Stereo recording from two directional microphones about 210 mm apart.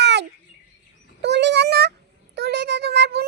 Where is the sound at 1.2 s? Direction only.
55° right (ahead or behind).